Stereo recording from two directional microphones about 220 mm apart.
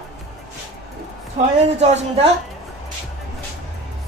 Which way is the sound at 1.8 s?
30° right (ahead or behind).